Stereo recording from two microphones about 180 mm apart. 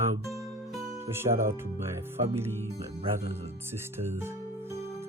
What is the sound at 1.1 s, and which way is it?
Speech, 15° right (ahead or behind).